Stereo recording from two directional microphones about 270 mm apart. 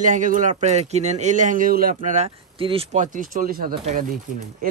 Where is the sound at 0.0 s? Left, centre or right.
Right.